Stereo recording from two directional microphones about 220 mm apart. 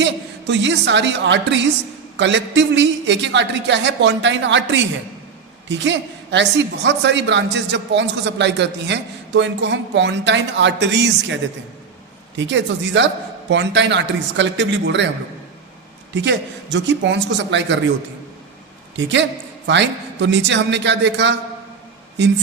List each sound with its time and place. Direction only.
0.0 s a woman's voice: 55° right (ahead or behind)
12.4 s a man's voice: 55° right (ahead or behind)
16.1 s a woman's voice: 50° right (ahead or behind)
18.9 s a woman's voice: 55° right (ahead or behind)